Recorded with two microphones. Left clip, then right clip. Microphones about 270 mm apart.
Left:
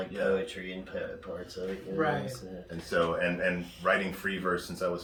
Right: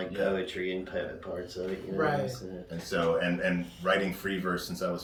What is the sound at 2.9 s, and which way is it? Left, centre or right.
Speech, centre.